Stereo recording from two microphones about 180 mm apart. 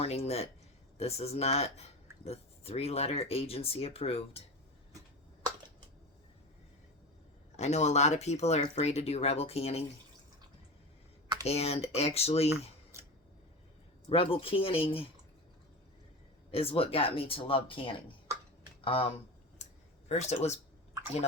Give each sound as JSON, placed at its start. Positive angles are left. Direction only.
{"t": 0.0, "sound": "speech", "side_deg": 35}
{"t": 7.5, "sound": "speech", "side_deg": 40}
{"t": 11.4, "sound": "speech", "side_deg": 35}
{"t": 12.9, "sound": "a sound", "side_deg": -15}
{"t": 14.1, "sound": "speech", "side_deg": 30}
{"t": 16.5, "sound": "speech", "side_deg": 30}
{"t": 20.1, "sound": "speech", "side_deg": 35}